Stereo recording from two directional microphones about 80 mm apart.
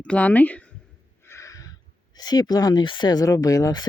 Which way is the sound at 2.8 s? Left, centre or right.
Left.